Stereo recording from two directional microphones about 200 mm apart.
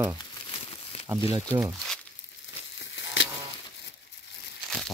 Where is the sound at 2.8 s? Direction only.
65° left (ahead or behind).